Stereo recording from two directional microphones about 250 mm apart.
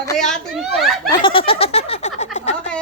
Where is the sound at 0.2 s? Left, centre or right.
Centre.